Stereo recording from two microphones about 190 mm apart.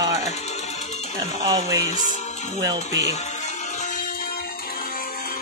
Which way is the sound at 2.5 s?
20° right (ahead or behind).